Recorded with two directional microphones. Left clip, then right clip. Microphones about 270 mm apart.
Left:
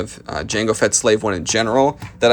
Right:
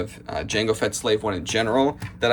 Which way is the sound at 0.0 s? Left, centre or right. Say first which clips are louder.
Left 3 dB; centre.